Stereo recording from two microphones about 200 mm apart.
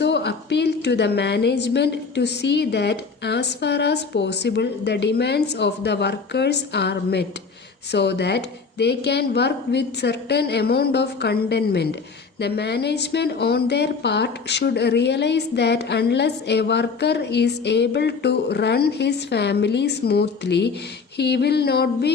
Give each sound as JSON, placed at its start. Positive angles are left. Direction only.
{"t": 0.0, "sound": "a woman's voice", "side_deg": 60}